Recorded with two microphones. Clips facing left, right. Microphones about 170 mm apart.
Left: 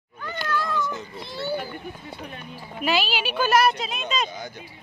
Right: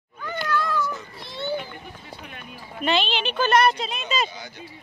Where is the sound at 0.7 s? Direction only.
20° left (ahead or behind).